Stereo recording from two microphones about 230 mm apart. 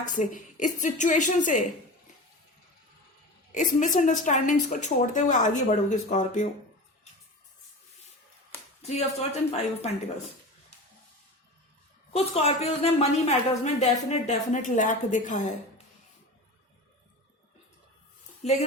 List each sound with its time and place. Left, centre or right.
0.0 s a woman's voice: left
3.5 s a woman's voice: left
8.8 s a woman's voice: left
12.1 s a woman's voice: left
18.4 s a woman's voice: left